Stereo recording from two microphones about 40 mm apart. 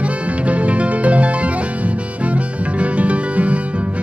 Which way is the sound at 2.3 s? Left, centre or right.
Right.